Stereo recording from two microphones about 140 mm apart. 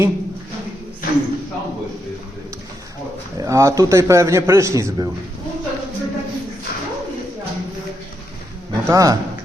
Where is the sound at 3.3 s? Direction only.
20° right (ahead or behind).